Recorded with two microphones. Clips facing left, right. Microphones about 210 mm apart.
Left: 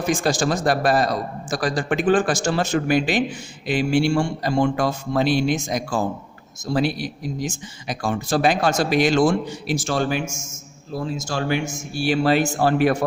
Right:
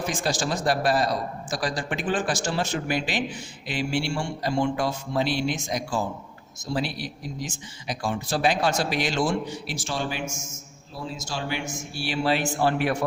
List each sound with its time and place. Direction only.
0.1 s speech: 50° left (ahead or behind)
4.1 s a man's voice: 65° left (ahead or behind)
4.5 s speech: 45° left (ahead or behind)